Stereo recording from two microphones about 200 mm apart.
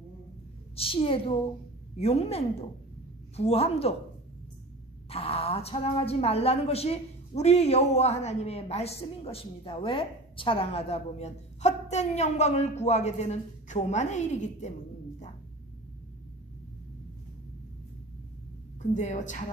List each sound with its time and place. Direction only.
0.7 s a woman's voice: 25° left (ahead or behind)
5.1 s a woman's voice: 30° left (ahead or behind)
18.8 s a woman's voice: 35° left (ahead or behind)